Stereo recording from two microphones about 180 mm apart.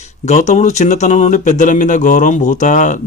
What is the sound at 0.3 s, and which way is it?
Speech, 40° left (ahead or behind).